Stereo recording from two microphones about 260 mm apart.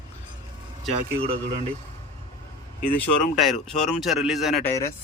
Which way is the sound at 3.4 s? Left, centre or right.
Centre.